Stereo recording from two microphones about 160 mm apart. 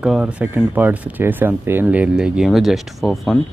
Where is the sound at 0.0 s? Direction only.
5° right (ahead or behind).